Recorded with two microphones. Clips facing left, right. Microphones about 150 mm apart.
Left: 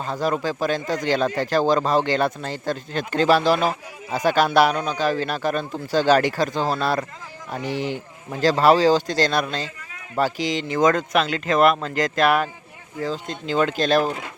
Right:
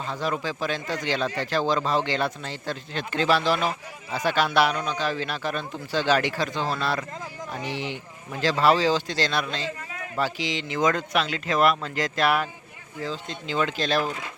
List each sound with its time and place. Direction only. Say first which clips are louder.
0.0 s a man's voice: left 5 dB; 40° left (ahead or behind)